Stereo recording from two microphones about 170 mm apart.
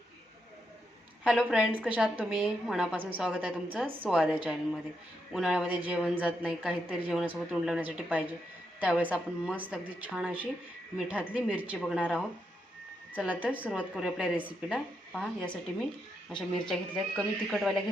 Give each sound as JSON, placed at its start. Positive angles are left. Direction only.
{"t": 1.5, "sound": "a woman's voice", "side_deg": -5}
{"t": 11.8, "sound": "a woman's voice", "side_deg": 5}